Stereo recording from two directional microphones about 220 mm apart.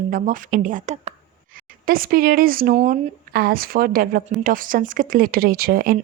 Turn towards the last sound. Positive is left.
turn(degrees=-40)  # may be behind; listen again after turning